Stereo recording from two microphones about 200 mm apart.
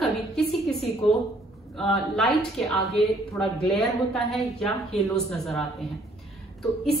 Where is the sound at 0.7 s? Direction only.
Centre (ahead or behind).